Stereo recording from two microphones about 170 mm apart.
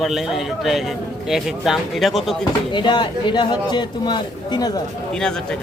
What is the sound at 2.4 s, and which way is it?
Speech, 25° left (ahead or behind).